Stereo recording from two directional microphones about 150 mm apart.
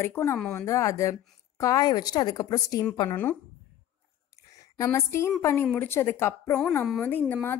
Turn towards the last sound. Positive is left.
turn(degrees=10)  # may be behind; listen again after turning